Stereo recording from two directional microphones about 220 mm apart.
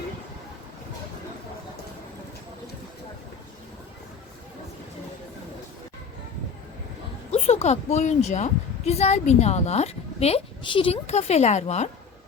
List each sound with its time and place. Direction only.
7.3 s a woman's voice: 25° left (ahead or behind)